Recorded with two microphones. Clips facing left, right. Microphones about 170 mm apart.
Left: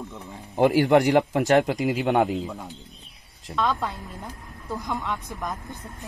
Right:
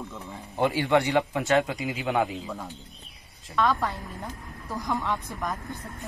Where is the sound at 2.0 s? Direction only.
40° left (ahead or behind).